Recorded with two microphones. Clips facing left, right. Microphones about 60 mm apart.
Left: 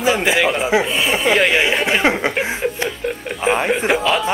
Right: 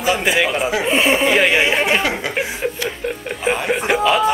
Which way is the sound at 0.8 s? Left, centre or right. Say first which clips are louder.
Right 3 dB; right.